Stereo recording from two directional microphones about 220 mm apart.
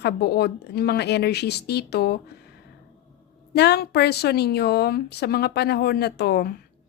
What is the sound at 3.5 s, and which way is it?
A woman's voice, 50° left (ahead or behind).